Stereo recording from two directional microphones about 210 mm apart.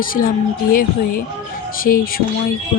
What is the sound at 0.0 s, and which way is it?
Speech, 40° left (ahead or behind).